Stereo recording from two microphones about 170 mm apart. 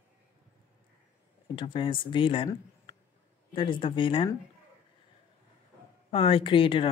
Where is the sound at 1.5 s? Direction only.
30° left (ahead or behind).